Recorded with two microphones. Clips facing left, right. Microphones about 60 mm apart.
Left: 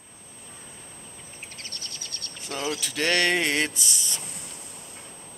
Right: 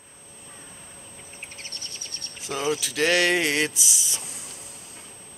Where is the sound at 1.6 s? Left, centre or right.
Right.